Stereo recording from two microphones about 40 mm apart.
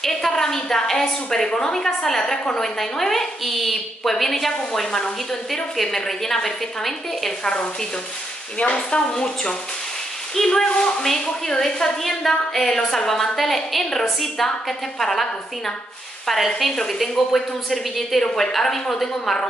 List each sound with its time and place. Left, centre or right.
0.0 s a woman's voice: centre
4.7 s a woman's voice: centre
5.5 s a woman's voice: centre
8.5 s a woman's voice: left; by 19.3 s centre